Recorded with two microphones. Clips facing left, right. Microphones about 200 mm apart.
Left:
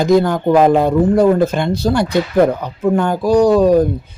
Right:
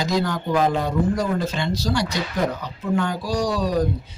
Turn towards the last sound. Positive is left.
turn(degrees=55)  # may be behind; listen again after turning